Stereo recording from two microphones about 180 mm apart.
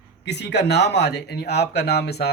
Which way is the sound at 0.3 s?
70° left (ahead or behind).